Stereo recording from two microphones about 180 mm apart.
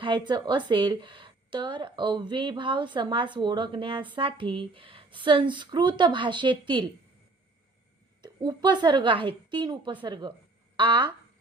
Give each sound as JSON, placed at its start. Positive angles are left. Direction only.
{"t": 0.0, "sound": "a woman's voice", "side_deg": -25}
{"t": 8.2, "sound": "a woman's voice", "side_deg": -25}